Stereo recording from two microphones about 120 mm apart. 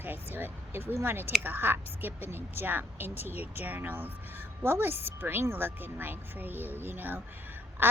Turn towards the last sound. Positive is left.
turn(degrees=-15)  # may be behind; listen again after turning